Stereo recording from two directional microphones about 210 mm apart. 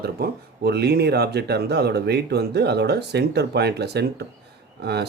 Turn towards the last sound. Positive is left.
turn(degrees=-50)  # may be behind; listen again after turning